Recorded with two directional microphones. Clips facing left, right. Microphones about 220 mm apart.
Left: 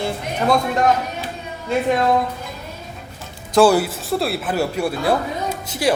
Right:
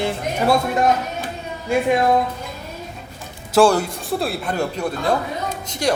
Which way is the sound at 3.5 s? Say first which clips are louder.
Left 1 dB; 5° left (ahead or behind).